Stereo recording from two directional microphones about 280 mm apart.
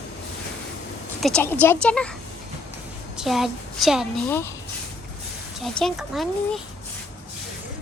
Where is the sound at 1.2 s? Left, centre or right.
Centre.